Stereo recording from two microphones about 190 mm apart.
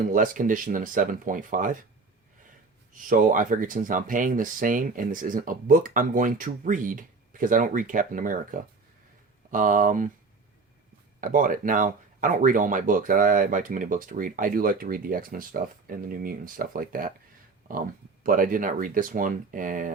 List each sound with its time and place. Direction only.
0.1 s speech: 45° right (ahead or behind)
2.9 s speech: 45° right (ahead or behind)
11.2 s speech: 45° right (ahead or behind)